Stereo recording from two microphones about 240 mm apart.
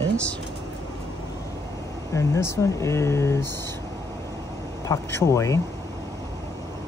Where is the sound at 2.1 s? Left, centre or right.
Centre.